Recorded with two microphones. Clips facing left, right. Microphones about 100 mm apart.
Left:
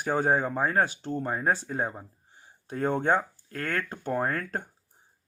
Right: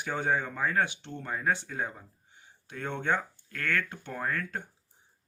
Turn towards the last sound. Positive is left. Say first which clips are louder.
# left 5 dB
turn(degrees=40)  # may be behind; listen again after turning